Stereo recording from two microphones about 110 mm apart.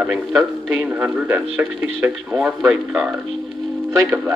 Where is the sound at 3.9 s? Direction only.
20° right (ahead or behind).